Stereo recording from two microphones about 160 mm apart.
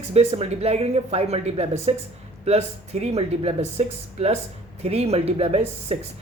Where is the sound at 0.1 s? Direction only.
40° right (ahead or behind).